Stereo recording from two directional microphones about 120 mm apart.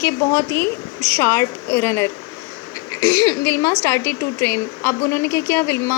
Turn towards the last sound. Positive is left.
turn(degrees=25)  # may be behind; listen again after turning